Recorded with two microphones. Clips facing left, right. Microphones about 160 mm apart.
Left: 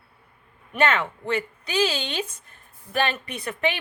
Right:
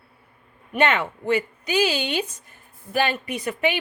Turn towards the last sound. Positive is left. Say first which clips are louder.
# right 3 dB
turn(degrees=-10)  # may be behind; listen again after turning